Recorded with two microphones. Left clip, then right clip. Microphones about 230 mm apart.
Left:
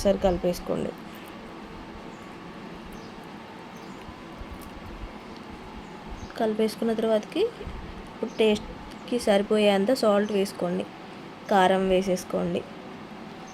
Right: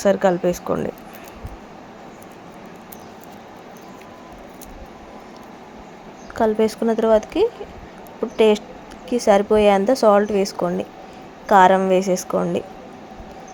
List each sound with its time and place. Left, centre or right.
0.0 s a woman's voice: centre
6.3 s a woman's voice: centre